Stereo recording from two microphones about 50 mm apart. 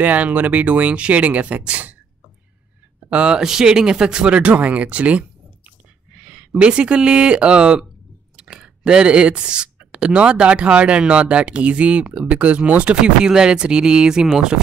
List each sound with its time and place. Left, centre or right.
0.0 s speech: right
3.1 s speech: right
3.3 s speech: centre